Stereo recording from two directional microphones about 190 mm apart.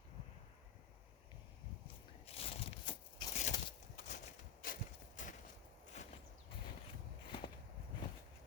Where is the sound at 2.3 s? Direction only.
30° left (ahead or behind).